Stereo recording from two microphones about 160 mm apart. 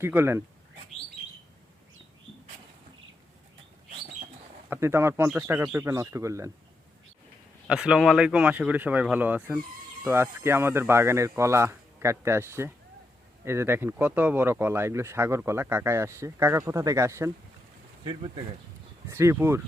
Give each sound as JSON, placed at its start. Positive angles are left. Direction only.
{"t": 0.0, "sound": "speech", "side_deg": -15}
{"t": 4.7, "sound": "speech", "side_deg": -15}
{"t": 7.7, "sound": "speech", "side_deg": -5}
{"t": 18.0, "sound": "speech", "side_deg": -30}
{"t": 19.1, "sound": "speech", "side_deg": -15}